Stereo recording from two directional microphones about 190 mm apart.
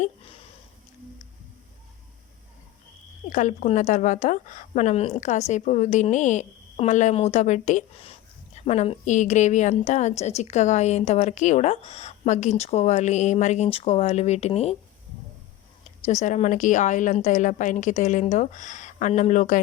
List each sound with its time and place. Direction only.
3.2 s a woman's voice: 40° left (ahead or behind)
16.2 s a woman's voice: 40° left (ahead or behind)